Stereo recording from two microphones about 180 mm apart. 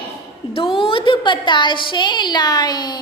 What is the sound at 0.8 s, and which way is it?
A woman's voice, 30° left (ahead or behind).